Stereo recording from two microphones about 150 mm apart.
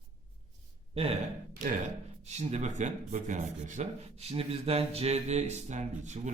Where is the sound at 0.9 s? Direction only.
45° right (ahead or behind).